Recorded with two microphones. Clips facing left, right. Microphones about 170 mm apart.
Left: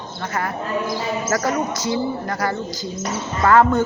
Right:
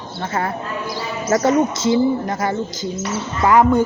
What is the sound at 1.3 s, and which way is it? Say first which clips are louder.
A woman's voice: right 8 dB; 20° right (ahead or behind).